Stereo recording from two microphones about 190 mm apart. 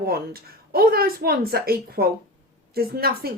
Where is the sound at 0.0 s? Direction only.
55° right (ahead or behind).